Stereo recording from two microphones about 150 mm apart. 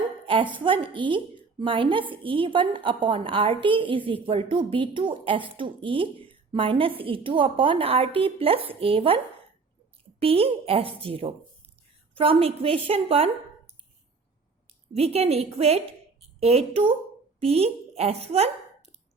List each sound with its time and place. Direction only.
0.3 s a woman's voice: 35° right (ahead or behind)
14.9 s a woman's voice: 45° right (ahead or behind)